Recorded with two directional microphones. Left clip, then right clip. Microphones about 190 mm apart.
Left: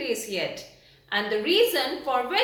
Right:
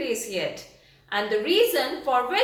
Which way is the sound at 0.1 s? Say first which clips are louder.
Right 1 dB; centre (ahead or behind).